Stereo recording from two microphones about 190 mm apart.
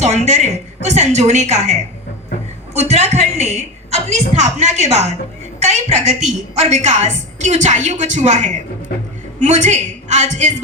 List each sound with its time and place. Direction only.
0.0 s a woman's voice: 35° right (ahead or behind)
2.7 s a woman's voice: 35° right (ahead or behind)